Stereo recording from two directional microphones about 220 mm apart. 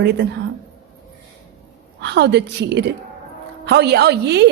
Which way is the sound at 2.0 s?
50° right (ahead or behind).